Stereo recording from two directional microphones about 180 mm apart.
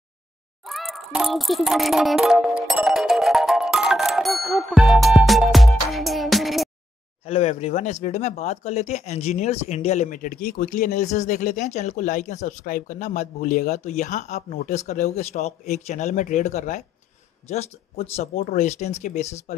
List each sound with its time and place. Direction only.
0.7 s music: centre (ahead or behind)
7.2 s speech: 35° left (ahead or behind)